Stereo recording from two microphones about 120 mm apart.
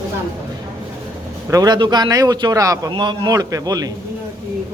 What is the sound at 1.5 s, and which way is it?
Speech, 35° right (ahead or behind).